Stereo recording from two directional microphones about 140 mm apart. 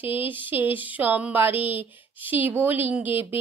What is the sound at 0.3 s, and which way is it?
A woman's voice, 15° right (ahead or behind).